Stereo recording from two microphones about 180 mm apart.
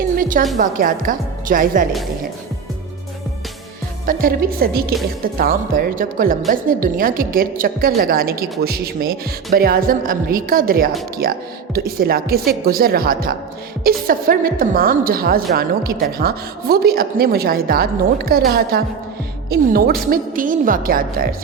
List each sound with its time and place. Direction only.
0.2 s a woman's voice: 50° right (ahead or behind)
4.0 s a woman's voice: 50° right (ahead or behind)